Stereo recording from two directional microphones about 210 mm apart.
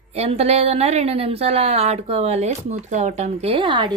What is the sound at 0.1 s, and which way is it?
A woman's voice, 30° right (ahead or behind).